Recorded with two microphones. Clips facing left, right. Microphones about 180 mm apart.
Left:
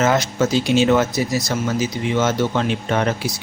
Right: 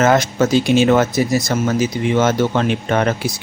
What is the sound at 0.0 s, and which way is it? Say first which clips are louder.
Speech: right 3 dB; 50° right (ahead or behind).